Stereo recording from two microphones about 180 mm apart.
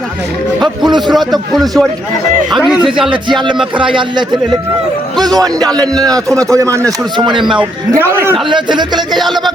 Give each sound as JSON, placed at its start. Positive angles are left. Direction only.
{"t": 0.9, "sound": "a man's voice", "side_deg": -25}
{"t": 1.1, "sound": "a man's voice", "side_deg": 0}
{"t": 3.8, "sound": "a man's voice", "side_deg": -25}
{"t": 5.2, "sound": "a man's voice", "side_deg": -20}
{"t": 8.0, "sound": "a man's voice", "side_deg": -15}
{"t": 8.4, "sound": "a man's voice", "side_deg": -25}